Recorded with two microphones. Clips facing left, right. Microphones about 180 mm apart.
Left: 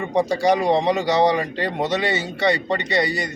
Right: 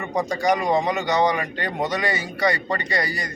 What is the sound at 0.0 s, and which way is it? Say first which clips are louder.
A man's voice: left 4 dB; 30° left (ahead or behind).